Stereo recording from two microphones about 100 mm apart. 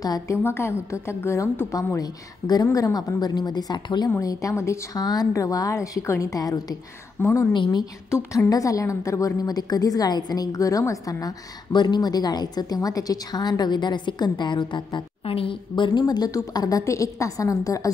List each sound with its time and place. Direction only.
0.0 s a woman's voice: 35° left (ahead or behind)
0.4 s a woman's voice: 25° left (ahead or behind); by 4.1 s 45° left (ahead or behind)
4.2 s a woman's voice: 35° left (ahead or behind)
7.2 s a woman's voice: 25° left (ahead or behind)
7.5 s a woman's voice: 50° left (ahead or behind)
7.8 s a woman's voice: 30° left (ahead or behind)